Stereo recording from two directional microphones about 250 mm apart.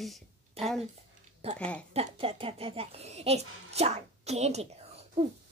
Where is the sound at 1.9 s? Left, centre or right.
Right.